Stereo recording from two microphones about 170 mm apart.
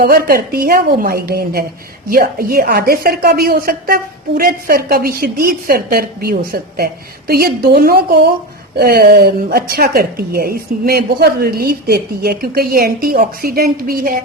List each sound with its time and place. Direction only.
0.0 s a woman's voice: 60° right (ahead or behind)